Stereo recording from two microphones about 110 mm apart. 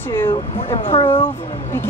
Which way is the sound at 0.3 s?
60° left (ahead or behind).